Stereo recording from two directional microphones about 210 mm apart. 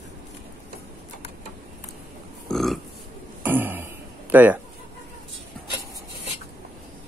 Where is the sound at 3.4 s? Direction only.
10° right (ahead or behind).